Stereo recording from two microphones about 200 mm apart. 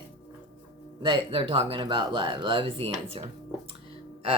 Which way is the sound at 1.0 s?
25° right (ahead or behind).